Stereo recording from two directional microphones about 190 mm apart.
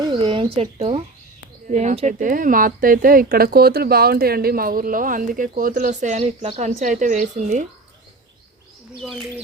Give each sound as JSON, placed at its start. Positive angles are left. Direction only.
{"t": 0.0, "sound": "speech", "side_deg": -25}
{"t": 1.6, "sound": "speech", "side_deg": -40}
{"t": 9.0, "sound": "speech", "side_deg": 0}